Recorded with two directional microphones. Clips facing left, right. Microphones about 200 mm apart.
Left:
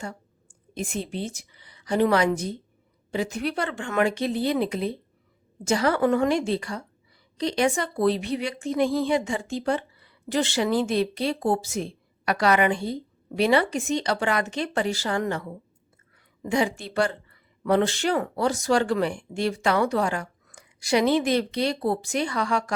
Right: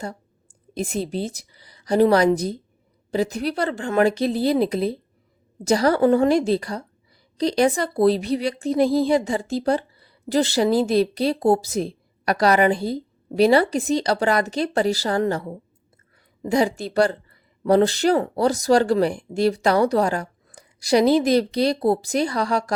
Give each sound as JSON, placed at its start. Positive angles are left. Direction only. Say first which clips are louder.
{"t": 0.7, "sound": "a woman's voice", "louder": "right 5 dB", "side_deg": -35}